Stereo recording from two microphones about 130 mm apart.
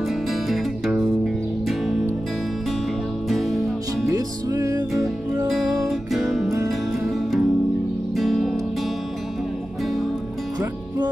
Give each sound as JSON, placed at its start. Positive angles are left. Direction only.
{"t": 0.1, "sound": "music", "side_deg": 0}
{"t": 3.3, "sound": "music", "side_deg": 0}
{"t": 4.1, "sound": "music", "side_deg": -25}
{"t": 5.5, "sound": "music", "side_deg": 0}